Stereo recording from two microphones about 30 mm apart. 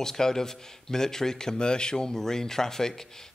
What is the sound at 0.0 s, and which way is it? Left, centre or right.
Speech, centre.